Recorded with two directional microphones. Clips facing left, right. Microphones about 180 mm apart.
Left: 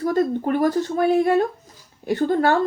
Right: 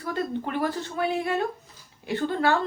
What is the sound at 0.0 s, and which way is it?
Speech, 40° left (ahead or behind).